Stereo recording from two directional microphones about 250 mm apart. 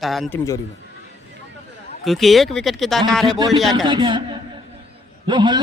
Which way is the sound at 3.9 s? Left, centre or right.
Centre.